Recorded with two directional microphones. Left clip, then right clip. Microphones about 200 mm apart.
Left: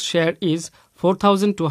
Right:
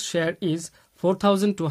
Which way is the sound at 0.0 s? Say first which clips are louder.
Left 5 dB; 25° left (ahead or behind).